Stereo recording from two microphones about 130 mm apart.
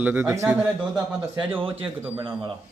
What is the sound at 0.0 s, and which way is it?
Speech, 15° right (ahead or behind).